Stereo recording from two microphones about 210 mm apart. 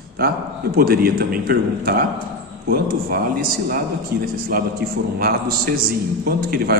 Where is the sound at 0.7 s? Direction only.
45° right (ahead or behind).